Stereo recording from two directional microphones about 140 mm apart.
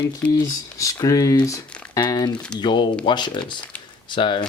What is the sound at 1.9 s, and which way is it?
Crumpling, 25° left (ahead or behind).